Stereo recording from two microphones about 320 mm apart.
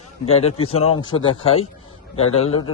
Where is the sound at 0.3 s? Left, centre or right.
Centre.